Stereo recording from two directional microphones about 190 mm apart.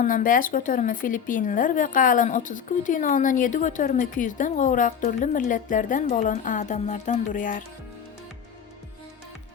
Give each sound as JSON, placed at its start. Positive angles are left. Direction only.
{"t": 0.0, "sound": "a woman's voice", "side_deg": 45}